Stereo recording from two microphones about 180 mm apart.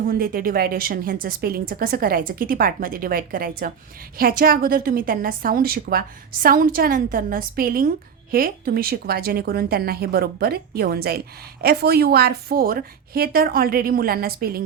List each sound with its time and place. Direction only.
0.0 s a woman's voice: 55° right (ahead or behind)